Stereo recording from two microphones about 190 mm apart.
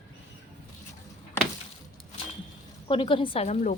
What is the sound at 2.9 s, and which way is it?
Speech, 25° left (ahead or behind).